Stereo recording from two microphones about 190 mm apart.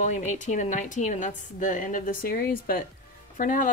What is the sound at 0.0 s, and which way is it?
A woman's voice, 40° left (ahead or behind).